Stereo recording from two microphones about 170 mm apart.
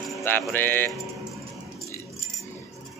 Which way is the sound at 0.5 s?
10° left (ahead or behind).